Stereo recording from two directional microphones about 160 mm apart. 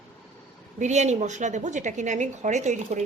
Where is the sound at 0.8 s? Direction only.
45° right (ahead or behind).